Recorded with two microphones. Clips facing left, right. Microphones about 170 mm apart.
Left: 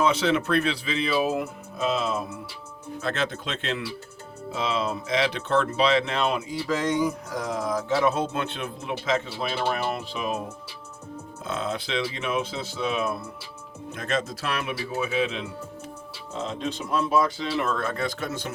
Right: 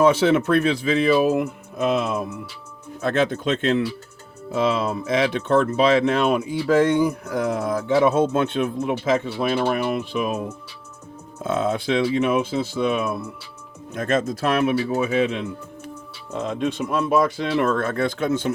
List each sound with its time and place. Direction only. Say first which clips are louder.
0.0 s speech: right 6 dB; 50° right (ahead or behind)
11.4 s speech: right 8 dB; 50° right (ahead or behind)